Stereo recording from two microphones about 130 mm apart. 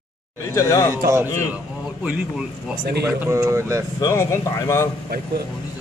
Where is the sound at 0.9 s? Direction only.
20° right (ahead or behind).